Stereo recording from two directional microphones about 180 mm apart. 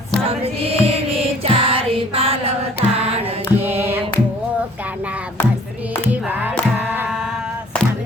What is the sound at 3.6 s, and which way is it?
Mantra, 10° right (ahead or behind).